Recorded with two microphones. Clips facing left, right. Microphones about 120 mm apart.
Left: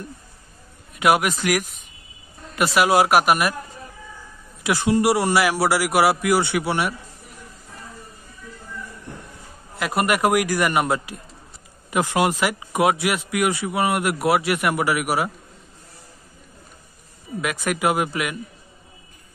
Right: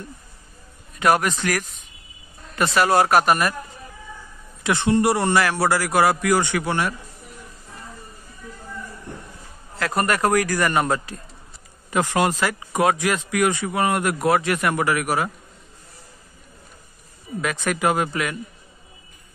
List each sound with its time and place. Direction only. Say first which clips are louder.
0.9 s speech: even; 10° left (ahead or behind)
4.8 s speech: even; 5° left (ahead or behind)
9.8 s speech: left 1 dB; 15° left (ahead or behind)
17.4 s speech: even; 10° left (ahead or behind)